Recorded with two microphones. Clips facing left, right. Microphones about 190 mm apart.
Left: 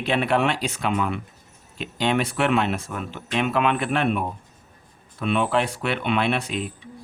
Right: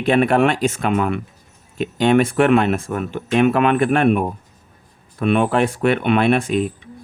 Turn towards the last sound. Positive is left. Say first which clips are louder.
# right 8 dB
turn(degrees=-50)  # may be behind; listen again after turning